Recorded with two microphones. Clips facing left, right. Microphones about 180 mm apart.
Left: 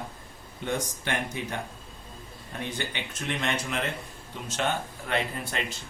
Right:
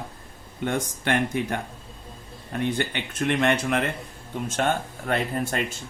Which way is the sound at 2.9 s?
55° right (ahead or behind).